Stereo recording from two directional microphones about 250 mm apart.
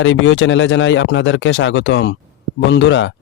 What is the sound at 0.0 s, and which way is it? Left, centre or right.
Speech, left.